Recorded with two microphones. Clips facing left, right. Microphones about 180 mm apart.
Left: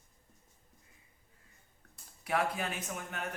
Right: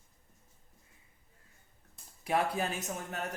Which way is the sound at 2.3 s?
35° right (ahead or behind).